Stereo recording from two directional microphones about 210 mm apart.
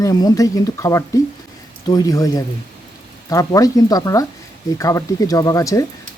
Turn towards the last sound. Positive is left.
turn(degrees=15)  # may be behind; listen again after turning